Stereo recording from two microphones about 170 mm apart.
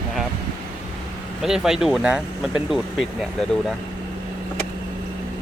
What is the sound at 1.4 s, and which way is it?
Speech, 5° right (ahead or behind).